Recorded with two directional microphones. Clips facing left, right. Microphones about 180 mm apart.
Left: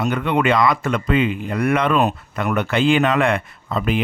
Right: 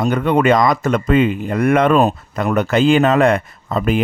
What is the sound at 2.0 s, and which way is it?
Speech, 35° right (ahead or behind).